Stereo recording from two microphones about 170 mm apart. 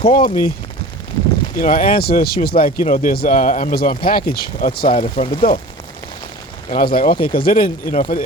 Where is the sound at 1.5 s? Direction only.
55° left (ahead or behind).